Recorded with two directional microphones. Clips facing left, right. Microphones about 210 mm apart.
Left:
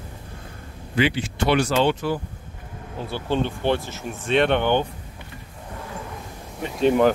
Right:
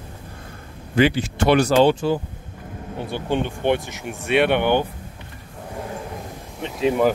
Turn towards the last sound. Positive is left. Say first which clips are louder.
# left 1 dB
turn(degrees=0)  # may be behind; listen again after turning